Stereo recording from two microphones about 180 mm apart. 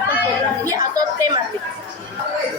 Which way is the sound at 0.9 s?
20° right (ahead or behind).